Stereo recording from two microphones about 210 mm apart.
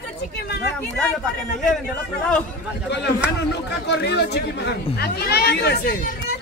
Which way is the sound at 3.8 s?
55° left (ahead or behind).